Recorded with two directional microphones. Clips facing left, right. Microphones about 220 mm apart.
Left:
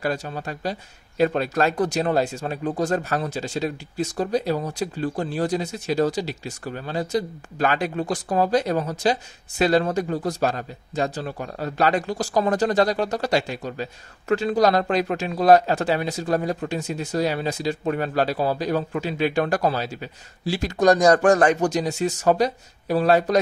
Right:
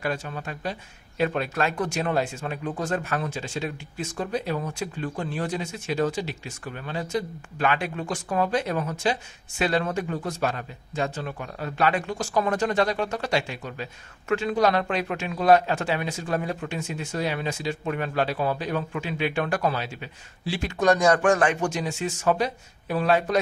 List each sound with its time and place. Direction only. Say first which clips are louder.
0.0 s speech: left 3 dB; 35° left (ahead or behind)